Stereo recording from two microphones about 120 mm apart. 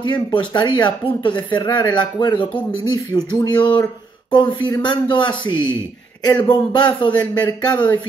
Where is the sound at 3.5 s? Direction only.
40° left (ahead or behind).